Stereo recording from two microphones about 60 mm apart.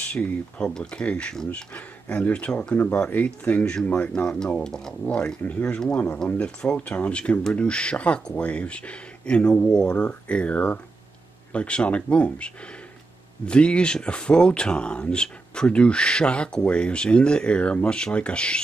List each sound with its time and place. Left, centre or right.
0.1 s speech: centre
1.3 s speech: centre
1.7 s speech: left
3.3 s speech: left
4.6 s speech: centre
5.0 s speech: left